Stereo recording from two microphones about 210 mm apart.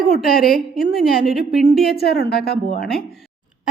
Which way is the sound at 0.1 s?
45° left (ahead or behind).